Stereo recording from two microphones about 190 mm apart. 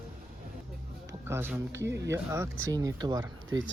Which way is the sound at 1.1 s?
15° right (ahead or behind).